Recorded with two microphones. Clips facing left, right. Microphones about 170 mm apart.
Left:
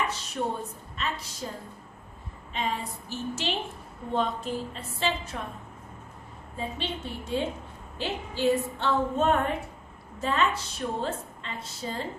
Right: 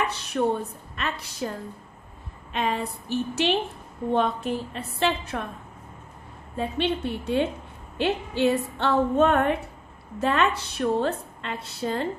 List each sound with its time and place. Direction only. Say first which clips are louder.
0.1 s a woman's voice: right 6 dB; 60° right (ahead or behind)
6.6 s a woman's voice: right 8 dB; 65° right (ahead or behind)